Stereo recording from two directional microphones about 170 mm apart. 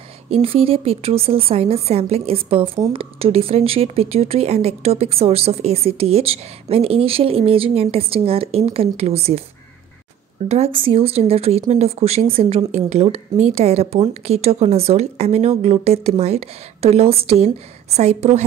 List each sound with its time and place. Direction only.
0.3 s speech: 35° right (ahead or behind)
10.5 s speech: 35° right (ahead or behind)